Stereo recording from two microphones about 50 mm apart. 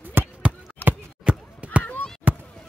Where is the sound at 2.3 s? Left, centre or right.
Right.